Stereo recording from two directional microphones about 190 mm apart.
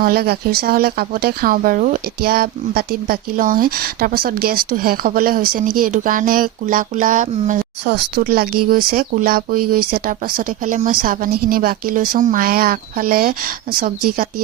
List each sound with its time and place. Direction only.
0.0 s speech: 55° right (ahead or behind)
7.9 s speech: 60° right (ahead or behind)